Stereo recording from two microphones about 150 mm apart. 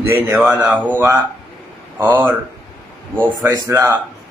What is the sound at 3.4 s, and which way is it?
Speech, 20° right (ahead or behind).